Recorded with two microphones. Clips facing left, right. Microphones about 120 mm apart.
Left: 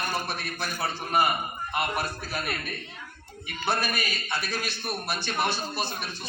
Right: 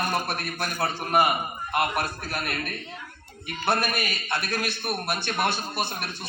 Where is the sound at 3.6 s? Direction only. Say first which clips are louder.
Right 3 dB; 55° right (ahead or behind).